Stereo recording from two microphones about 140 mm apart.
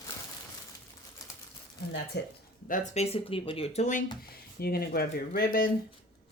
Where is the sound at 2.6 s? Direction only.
65° left (ahead or behind).